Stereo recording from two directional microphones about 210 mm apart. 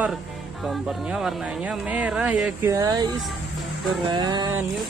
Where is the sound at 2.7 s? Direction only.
15° right (ahead or behind).